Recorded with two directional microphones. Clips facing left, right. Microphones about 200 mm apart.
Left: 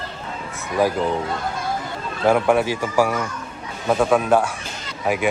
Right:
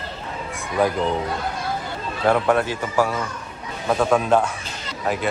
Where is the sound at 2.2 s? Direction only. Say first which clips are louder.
Left 2 dB; 10° left (ahead or behind).